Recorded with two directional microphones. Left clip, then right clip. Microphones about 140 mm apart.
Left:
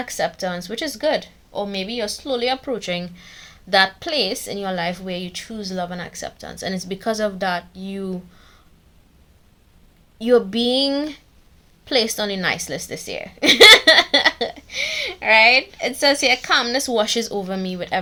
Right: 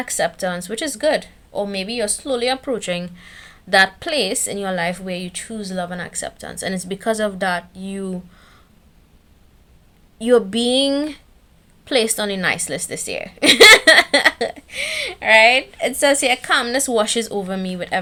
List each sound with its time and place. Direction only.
0.0 s a woman's voice: 35° right (ahead or behind)
10.2 s a woman's voice: 30° right (ahead or behind)